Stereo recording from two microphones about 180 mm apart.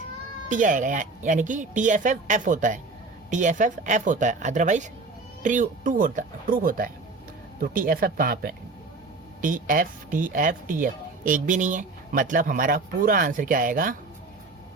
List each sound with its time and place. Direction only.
0.4 s speech: 45° right (ahead or behind)